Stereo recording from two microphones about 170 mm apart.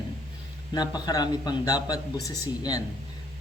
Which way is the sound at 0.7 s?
25° left (ahead or behind).